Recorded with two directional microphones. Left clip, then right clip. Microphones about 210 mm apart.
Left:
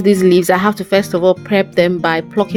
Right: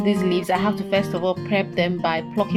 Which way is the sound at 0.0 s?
55° left (ahead or behind).